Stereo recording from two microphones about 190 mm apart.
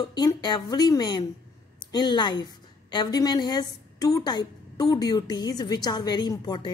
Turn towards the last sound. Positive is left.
turn(degrees=20)  # may be behind; listen again after turning